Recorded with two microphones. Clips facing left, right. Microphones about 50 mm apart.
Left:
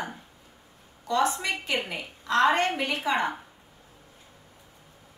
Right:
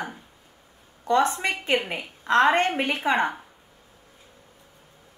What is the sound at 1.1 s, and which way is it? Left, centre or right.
A woman's voice, right.